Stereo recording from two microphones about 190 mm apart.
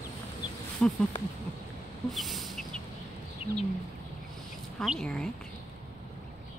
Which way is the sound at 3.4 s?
30° left (ahead or behind).